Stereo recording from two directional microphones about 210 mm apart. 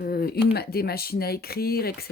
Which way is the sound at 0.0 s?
45° left (ahead or behind).